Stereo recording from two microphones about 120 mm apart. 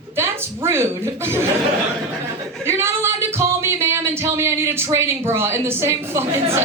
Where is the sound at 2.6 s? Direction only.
20° right (ahead or behind).